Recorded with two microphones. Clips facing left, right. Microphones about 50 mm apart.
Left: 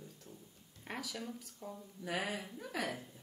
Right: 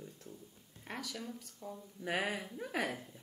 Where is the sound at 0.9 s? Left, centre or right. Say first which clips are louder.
Even; centre.